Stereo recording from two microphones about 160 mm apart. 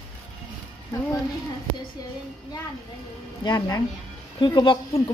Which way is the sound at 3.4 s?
25° left (ahead or behind).